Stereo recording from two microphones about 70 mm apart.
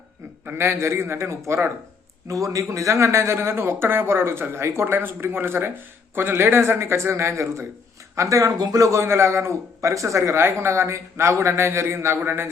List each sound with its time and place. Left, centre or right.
0.4 s speech: right
2.2 s speech: right
8.5 s speech: right